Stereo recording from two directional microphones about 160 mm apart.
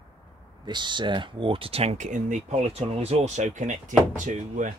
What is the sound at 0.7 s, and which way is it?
Speech, 30° right (ahead or behind).